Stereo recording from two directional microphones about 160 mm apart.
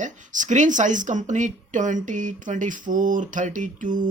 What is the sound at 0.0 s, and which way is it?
Speech, 50° right (ahead or behind).